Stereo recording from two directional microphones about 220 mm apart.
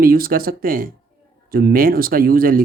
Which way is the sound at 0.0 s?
40° right (ahead or behind).